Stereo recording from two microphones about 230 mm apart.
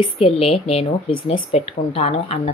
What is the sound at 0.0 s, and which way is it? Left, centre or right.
Speech, left.